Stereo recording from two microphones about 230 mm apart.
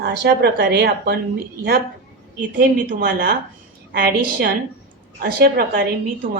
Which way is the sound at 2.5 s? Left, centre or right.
Right.